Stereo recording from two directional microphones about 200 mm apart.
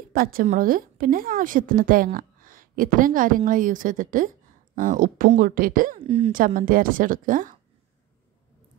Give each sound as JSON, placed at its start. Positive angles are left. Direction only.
{"t": 0.1, "sound": "a woman's voice", "side_deg": -45}
{"t": 6.0, "sound": "a woman's voice", "side_deg": -30}
{"t": 6.3, "sound": "a woman's voice", "side_deg": -45}